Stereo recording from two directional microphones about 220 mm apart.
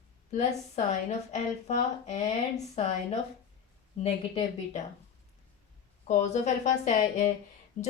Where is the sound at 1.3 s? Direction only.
30° left (ahead or behind).